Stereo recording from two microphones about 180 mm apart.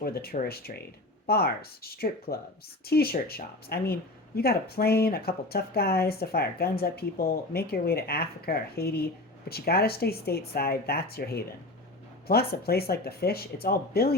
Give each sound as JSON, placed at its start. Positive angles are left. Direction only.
{"t": 0.0, "sound": "speech", "side_deg": 60}